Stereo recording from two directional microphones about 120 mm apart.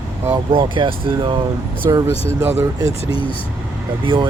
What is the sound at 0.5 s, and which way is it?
Speech, 45° right (ahead or behind).